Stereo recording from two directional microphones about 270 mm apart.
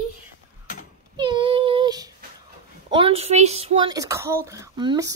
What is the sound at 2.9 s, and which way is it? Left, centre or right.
Speech, right.